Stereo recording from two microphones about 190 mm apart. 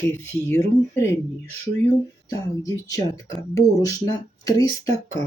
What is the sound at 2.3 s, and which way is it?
Speech, 15° left (ahead or behind).